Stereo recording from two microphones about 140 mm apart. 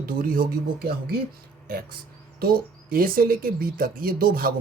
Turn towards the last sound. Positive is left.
turn(degrees=-90)